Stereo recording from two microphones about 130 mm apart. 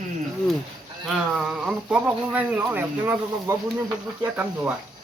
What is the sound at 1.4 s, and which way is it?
Speech, 5° right (ahead or behind).